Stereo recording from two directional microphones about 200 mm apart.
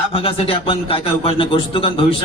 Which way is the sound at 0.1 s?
25° left (ahead or behind).